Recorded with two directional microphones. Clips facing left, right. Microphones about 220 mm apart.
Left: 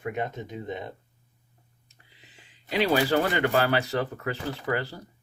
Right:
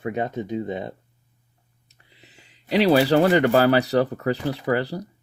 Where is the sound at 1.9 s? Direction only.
40° right (ahead or behind).